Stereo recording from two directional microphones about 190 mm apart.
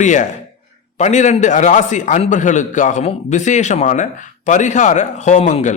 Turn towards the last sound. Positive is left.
turn(degrees=40)  # may be behind; listen again after turning